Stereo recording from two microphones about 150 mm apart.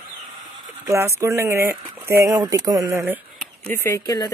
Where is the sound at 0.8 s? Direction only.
20° right (ahead or behind).